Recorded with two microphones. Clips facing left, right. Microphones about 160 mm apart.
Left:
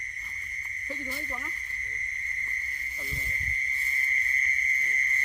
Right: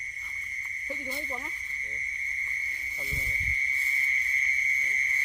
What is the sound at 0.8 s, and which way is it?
Speech, 15° right (ahead or behind).